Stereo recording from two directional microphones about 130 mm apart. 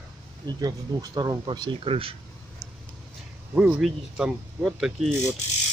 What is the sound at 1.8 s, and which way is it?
Speech, 45° right (ahead or behind).